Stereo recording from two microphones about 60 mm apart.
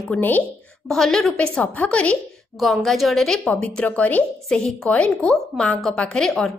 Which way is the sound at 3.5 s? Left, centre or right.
Left.